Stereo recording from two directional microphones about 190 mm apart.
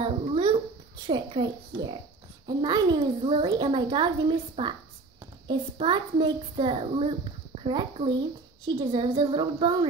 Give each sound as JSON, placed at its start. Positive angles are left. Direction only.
{"t": 0.0, "sound": "babbling", "side_deg": -30}
{"t": 1.0, "sound": "a child's voice", "side_deg": -25}